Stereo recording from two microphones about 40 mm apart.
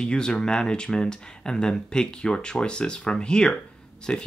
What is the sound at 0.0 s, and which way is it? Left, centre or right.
Speech, left.